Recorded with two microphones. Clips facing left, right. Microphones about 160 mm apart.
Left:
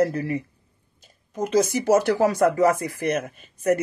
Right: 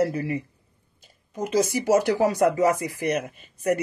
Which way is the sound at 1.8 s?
15° right (ahead or behind).